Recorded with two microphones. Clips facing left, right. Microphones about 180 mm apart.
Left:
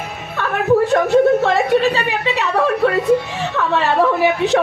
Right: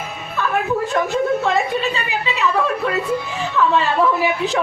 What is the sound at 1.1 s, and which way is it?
A woman's voice, 70° left (ahead or behind).